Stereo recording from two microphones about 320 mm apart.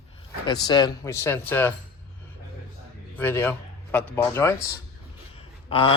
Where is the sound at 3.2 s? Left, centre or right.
Centre.